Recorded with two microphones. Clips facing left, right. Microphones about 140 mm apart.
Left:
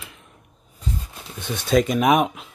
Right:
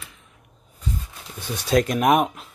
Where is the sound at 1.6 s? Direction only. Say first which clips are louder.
Left 1 dB; centre (ahead or behind).